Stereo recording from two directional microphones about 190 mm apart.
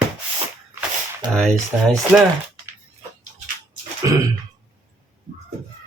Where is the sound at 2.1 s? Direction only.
Centre (ahead or behind).